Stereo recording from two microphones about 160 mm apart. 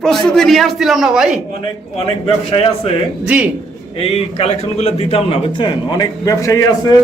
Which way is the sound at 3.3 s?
10° right (ahead or behind).